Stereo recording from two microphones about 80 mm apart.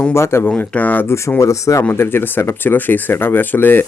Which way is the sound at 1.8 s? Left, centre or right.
Left.